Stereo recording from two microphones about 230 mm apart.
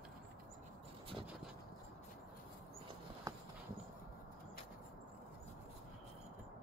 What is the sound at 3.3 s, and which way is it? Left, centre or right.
Horse, centre.